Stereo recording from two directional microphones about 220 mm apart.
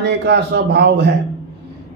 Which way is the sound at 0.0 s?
50° right (ahead or behind).